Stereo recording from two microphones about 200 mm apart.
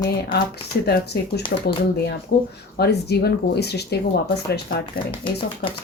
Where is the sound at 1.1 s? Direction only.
55° left (ahead or behind).